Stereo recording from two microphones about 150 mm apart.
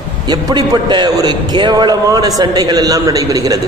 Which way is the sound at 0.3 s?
30° right (ahead or behind).